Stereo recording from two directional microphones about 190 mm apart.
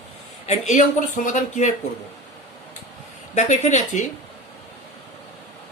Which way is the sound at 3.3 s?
40° left (ahead or behind).